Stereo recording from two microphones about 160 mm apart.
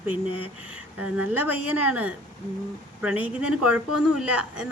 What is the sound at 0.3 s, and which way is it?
Speech, 35° left (ahead or behind).